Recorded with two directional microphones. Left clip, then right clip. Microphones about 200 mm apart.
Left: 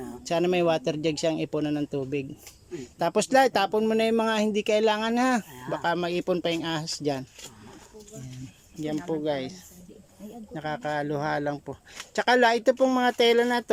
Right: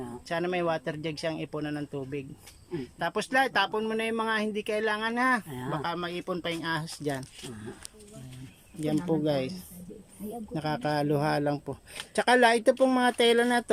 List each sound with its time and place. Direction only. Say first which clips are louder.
0.3 s a man's voice: left 5 dB; 15° left (ahead or behind)
9.0 s a man's voice: even; 5° right (ahead or behind)